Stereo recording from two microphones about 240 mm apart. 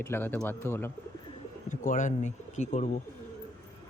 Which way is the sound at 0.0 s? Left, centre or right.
Centre.